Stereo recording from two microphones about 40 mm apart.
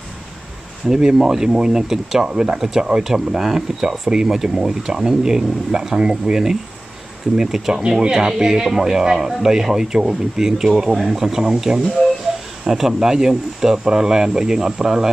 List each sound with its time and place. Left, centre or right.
0.8 s speech: centre